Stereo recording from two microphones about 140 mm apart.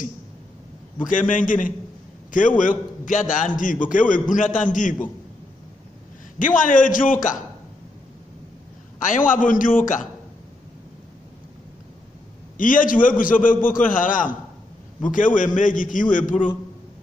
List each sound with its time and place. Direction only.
1.0 s a man's voice: 70° left (ahead or behind)
6.3 s a man's voice: 70° left (ahead or behind)
9.0 s a man's voice: 70° left (ahead or behind)
12.5 s a man's voice: 75° left (ahead or behind)